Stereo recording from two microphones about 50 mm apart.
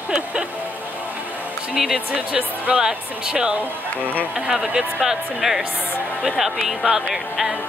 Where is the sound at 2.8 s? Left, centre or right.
Centre.